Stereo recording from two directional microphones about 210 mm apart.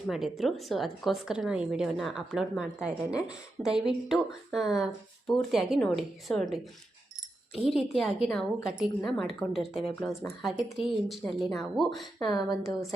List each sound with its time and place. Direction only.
0.1 s a woman's voice: centre (ahead or behind)
12.2 s a woman's voice: 15° left (ahead or behind)